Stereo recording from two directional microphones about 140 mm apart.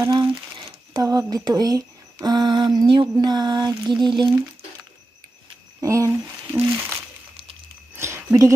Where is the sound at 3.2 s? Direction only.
30° right (ahead or behind).